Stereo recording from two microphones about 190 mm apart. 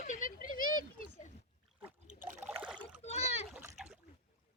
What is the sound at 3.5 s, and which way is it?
Splash, 5° right (ahead or behind).